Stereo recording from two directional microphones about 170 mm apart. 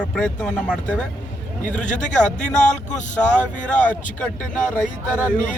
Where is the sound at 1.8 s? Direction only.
45° left (ahead or behind).